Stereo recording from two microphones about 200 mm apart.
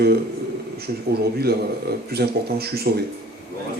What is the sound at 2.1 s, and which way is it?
Speech, 55° right (ahead or behind).